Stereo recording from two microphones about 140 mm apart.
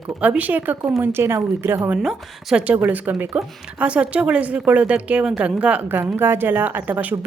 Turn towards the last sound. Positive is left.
turn(degrees=-10)  # may be behind; listen again after turning